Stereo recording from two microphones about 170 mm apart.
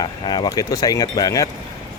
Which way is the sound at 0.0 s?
25° left (ahead or behind).